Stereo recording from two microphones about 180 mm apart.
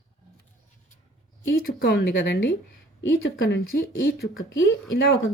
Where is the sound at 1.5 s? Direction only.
65° left (ahead or behind).